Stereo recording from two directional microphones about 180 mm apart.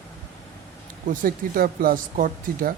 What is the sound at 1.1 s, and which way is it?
Speech, 55° right (ahead or behind).